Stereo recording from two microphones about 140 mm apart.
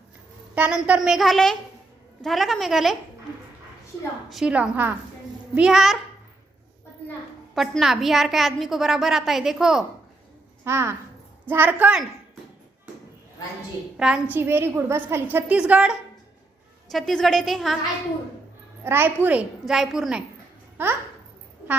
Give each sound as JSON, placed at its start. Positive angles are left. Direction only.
{"t": 0.5, "sound": "a woman's voice", "side_deg": -10}
{"t": 4.3, "sound": "a woman's voice", "side_deg": -5}
{"t": 7.5, "sound": "a woman's voice", "side_deg": 0}
{"t": 10.6, "sound": "a woman's voice", "side_deg": -20}
{"t": 13.9, "sound": "a woman's voice", "side_deg": -5}
{"t": 18.9, "sound": "a woman's voice", "side_deg": -15}
{"t": 20.8, "sound": "a woman's voice", "side_deg": -15}